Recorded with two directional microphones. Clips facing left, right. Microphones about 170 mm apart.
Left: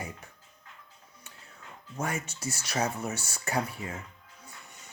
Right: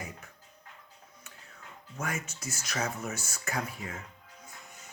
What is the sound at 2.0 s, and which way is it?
Speech, 30° left (ahead or behind).